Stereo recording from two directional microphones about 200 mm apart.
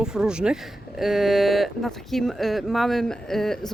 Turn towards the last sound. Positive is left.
turn(degrees=0)  # may be behind; listen again after turning